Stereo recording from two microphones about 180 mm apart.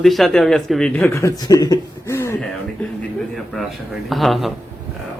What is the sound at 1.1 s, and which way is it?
Speech, 15° left (ahead or behind).